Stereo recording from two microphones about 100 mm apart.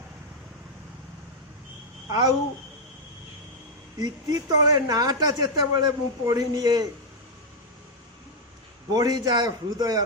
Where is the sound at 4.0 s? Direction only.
40° right (ahead or behind).